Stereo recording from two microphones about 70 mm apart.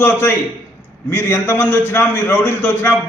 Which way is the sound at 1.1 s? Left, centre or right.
Left.